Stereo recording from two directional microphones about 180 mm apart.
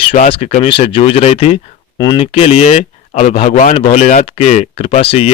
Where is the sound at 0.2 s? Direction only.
35° left (ahead or behind).